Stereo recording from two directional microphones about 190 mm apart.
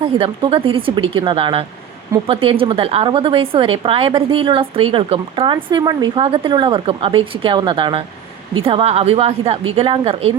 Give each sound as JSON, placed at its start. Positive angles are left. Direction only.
{"t": 0.0, "sound": "a woman's voice", "side_deg": -30}